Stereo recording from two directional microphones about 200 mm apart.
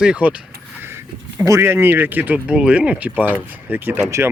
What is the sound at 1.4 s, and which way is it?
Speech, 10° right (ahead or behind).